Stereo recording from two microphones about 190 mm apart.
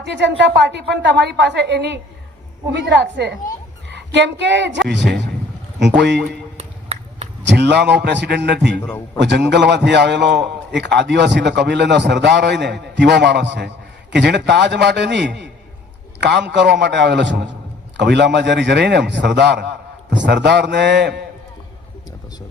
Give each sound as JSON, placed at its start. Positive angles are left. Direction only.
{"t": 0.0, "sound": "a man's voice", "side_deg": -65}
{"t": 5.8, "sound": "a man's voice", "side_deg": -65}
{"t": 6.6, "sound": "a sound", "side_deg": -30}
{"t": 7.4, "sound": "a man's voice", "side_deg": -65}